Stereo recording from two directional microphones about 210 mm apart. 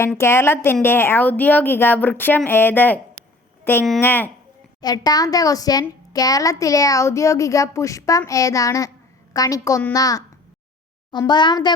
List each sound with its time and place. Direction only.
0.0 s a woman's voice: 10° left (ahead or behind)